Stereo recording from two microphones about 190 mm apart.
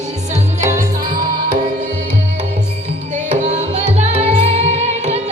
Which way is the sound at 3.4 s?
35° right (ahead or behind).